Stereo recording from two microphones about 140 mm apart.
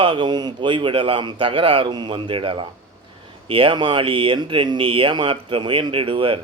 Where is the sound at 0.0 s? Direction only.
35° right (ahead or behind).